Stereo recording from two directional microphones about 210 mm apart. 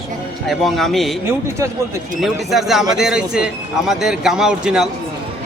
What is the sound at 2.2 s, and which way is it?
A man's voice, centre (ahead or behind).